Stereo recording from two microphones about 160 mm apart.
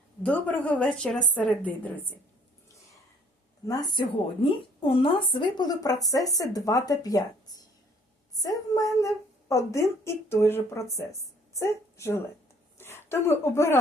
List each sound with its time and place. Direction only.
0.2 s a woman's voice: 10° left (ahead or behind)
3.7 s a woman's voice: 25° left (ahead or behind)